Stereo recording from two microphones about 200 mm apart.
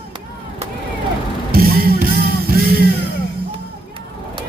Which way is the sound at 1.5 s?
50° right (ahead or behind).